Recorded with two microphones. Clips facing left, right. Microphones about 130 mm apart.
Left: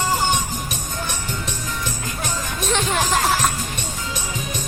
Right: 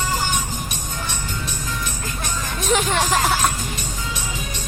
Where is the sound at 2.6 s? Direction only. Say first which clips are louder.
Right 2 dB; centre (ahead or behind).